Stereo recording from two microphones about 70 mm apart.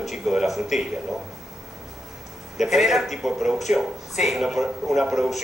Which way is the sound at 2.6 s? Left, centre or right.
Centre.